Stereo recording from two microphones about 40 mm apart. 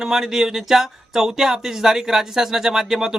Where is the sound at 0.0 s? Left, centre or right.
Centre.